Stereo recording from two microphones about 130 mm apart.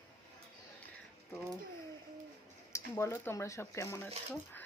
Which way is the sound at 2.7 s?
20° left (ahead or behind).